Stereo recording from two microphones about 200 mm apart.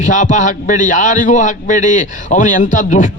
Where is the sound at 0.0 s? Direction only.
40° left (ahead or behind).